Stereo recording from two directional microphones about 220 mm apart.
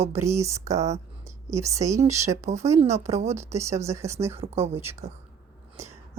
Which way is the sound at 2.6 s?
30° right (ahead or behind).